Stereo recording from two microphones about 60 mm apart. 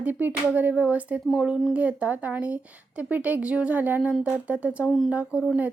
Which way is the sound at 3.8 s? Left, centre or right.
Right.